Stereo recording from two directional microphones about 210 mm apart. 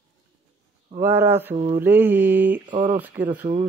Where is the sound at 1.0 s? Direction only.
10° right (ahead or behind).